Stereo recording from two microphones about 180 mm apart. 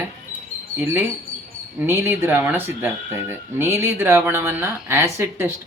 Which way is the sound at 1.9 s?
15° right (ahead or behind).